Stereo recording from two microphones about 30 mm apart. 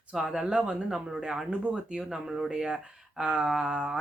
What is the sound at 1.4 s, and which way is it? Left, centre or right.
Speech, right.